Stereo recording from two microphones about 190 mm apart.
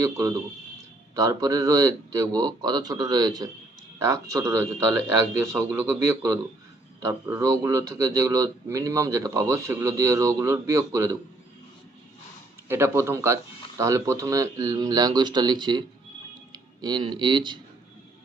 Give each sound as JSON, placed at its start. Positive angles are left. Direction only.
{"t": 0.0, "sound": "speech", "side_deg": -15}
{"t": 12.6, "sound": "speech", "side_deg": -10}